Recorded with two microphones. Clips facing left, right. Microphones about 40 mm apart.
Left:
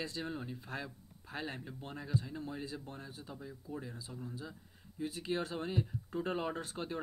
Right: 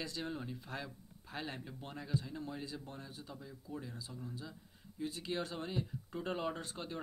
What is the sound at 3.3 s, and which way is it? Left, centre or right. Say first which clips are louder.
Speech: left 3 dB; centre.